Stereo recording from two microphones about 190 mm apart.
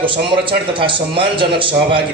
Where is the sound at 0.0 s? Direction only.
25° right (ahead or behind).